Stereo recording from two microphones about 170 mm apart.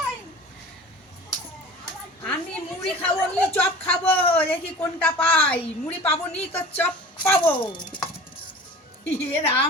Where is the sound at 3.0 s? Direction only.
10° left (ahead or behind).